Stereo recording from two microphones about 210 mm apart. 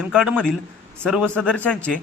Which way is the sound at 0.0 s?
Centre (ahead or behind).